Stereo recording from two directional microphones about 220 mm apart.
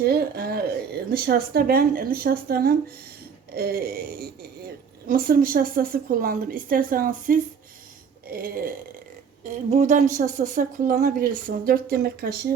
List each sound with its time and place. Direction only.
0.0 s a woman's voice: 45° right (ahead or behind)